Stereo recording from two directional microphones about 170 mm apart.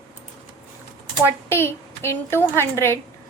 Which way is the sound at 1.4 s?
15° left (ahead or behind).